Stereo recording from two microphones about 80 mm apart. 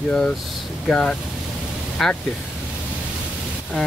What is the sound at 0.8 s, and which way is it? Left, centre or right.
Speech, centre.